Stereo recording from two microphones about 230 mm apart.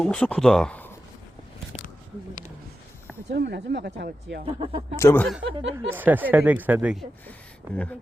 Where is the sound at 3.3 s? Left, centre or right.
Right.